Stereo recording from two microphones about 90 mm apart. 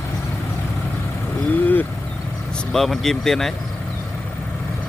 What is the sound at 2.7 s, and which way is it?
Speech, 5° left (ahead or behind).